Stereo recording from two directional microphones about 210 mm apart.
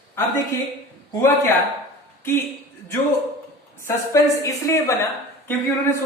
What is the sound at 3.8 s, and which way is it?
Speech, 15° left (ahead or behind).